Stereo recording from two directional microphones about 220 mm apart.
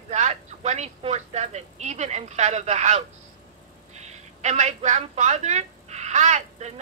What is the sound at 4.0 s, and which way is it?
A woman's voice, 30° right (ahead or behind).